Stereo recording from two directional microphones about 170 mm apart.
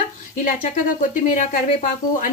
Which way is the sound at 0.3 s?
50° left (ahead or behind).